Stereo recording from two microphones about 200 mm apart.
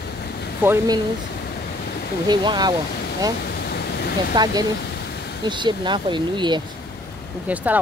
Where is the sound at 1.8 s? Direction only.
50° left (ahead or behind).